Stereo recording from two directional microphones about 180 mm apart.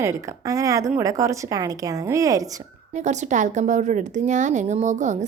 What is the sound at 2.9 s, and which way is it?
A woman's voice, 40° right (ahead or behind).